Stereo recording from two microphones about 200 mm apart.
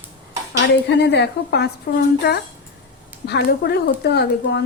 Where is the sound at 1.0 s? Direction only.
60° left (ahead or behind).